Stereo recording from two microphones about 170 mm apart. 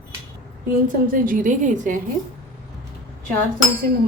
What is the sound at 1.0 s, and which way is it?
Speech, 55° right (ahead or behind).